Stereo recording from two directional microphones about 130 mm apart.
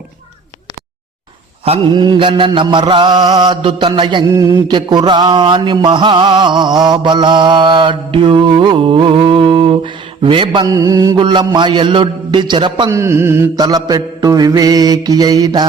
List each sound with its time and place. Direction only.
1.9 s mantra: 35° right (ahead or behind)
4.3 s mantra: 25° right (ahead or behind)
11.2 s mantra: 40° right (ahead or behind)
12.9 s mantra: 20° right (ahead or behind)
13.6 s mantra: 30° right (ahead or behind)